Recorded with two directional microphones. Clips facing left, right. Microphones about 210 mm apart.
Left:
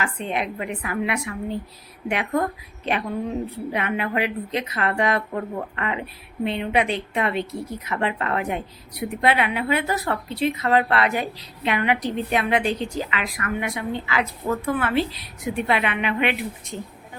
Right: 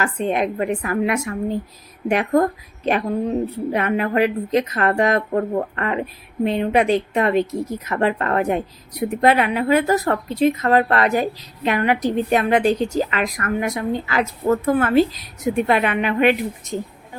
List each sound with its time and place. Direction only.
0.0 s a woman's voice: 45° right (ahead or behind)